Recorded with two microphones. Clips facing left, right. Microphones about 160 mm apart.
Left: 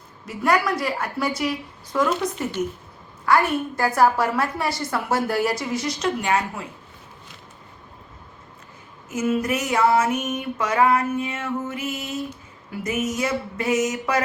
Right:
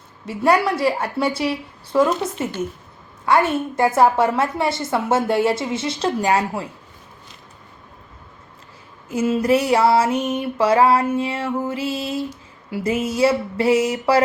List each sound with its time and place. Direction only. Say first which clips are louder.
0.3 s a woman's voice: right 4 dB; 30° right (ahead or behind)
9.0 s female singing: right 5 dB; 30° right (ahead or behind)